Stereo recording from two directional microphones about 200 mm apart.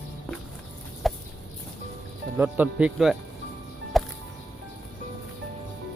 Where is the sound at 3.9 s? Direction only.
Centre (ahead or behind).